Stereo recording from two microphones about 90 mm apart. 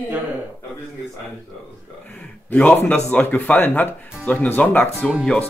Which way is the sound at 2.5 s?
15° left (ahead or behind).